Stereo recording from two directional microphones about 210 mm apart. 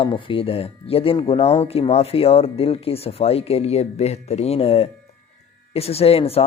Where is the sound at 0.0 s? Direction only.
25° left (ahead or behind).